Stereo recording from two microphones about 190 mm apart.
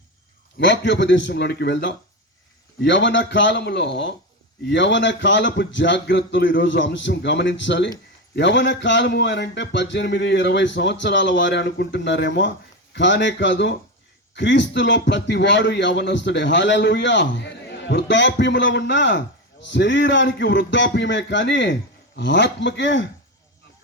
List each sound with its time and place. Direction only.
0.6 s speech: 70° left (ahead or behind)